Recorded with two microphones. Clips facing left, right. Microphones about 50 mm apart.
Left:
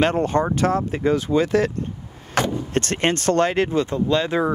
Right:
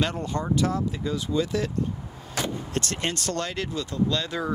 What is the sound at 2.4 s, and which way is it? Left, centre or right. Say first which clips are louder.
Speech: left 6 dB; left.